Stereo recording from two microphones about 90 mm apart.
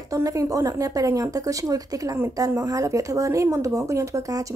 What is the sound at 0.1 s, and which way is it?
Speech, 40° right (ahead or behind).